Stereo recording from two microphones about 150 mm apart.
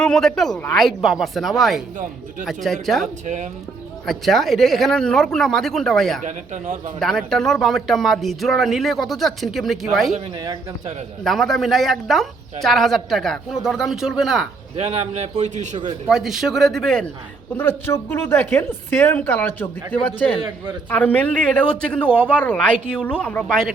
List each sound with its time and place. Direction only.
0.0 s speech: 5° left (ahead or behind)
3.2 s speech: 55° right (ahead or behind)
4.0 s speech: centre (ahead or behind)
6.2 s a man's voice: 50° right (ahead or behind)
7.0 s speech: 5° left (ahead or behind)
11.2 s speech: centre (ahead or behind)
14.8 s a man's voice: 45° right (ahead or behind)
16.0 s speech: centre (ahead or behind)
17.6 s a woman's voice: 15° left (ahead or behind)